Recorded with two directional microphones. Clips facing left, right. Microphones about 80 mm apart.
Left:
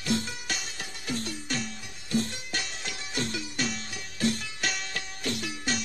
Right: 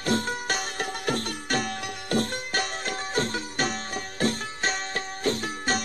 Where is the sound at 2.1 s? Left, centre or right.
Right.